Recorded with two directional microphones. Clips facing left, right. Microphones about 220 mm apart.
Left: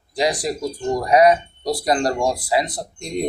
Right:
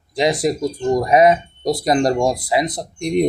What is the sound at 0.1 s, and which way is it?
Speech, 25° right (ahead or behind).